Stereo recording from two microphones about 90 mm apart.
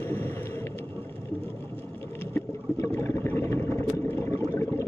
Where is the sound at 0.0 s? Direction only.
25° left (ahead or behind).